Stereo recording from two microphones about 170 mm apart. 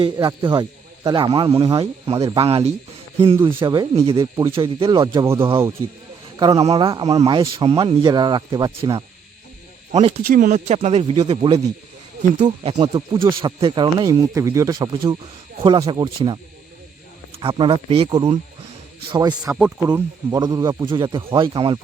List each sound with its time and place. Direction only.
0.0 s speech: 30° right (ahead or behind)
6.4 s speech: 25° right (ahead or behind)
10.2 s speech: 50° right (ahead or behind); by 16.4 s 25° right (ahead or behind)
17.4 s speech: 30° right (ahead or behind)